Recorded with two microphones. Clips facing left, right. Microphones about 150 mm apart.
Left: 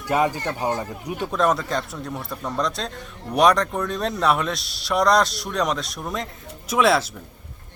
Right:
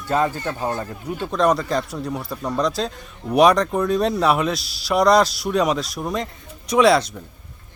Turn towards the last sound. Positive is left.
turn(degrees=0)  # may be behind; listen again after turning